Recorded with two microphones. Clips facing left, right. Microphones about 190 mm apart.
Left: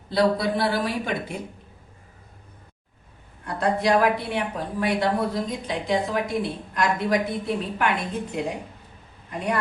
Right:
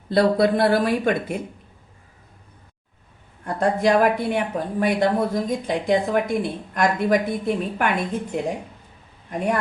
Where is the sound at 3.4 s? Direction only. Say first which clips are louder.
Right 3 dB; 50° right (ahead or behind).